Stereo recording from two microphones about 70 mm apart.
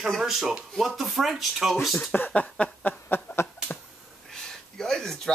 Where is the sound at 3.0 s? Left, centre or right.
Left.